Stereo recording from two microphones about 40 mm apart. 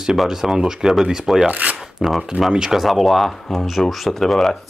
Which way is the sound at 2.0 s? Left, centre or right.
Centre.